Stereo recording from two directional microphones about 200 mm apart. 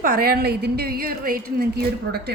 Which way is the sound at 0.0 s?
45° right (ahead or behind).